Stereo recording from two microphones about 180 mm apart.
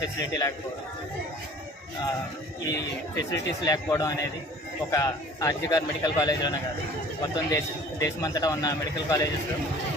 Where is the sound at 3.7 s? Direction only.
20° left (ahead or behind).